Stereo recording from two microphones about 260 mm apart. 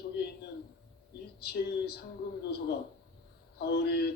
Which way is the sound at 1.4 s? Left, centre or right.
Left.